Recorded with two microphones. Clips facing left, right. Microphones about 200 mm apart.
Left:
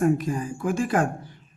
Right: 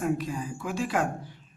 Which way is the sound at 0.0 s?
50° left (ahead or behind).